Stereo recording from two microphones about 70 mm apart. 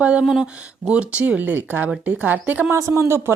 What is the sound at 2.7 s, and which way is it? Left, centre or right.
Speech, right.